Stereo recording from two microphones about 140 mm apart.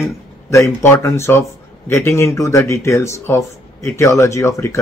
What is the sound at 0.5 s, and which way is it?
Speech, 20° left (ahead or behind).